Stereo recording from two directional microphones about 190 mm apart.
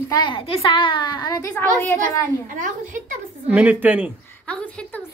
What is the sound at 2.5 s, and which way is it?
Speech, 45° right (ahead or behind).